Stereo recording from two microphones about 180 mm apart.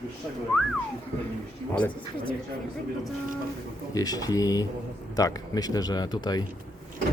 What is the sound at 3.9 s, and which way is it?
Speech, 20° left (ahead or behind).